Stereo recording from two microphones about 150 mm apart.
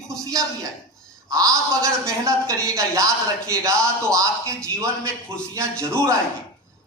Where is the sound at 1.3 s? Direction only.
25° right (ahead or behind).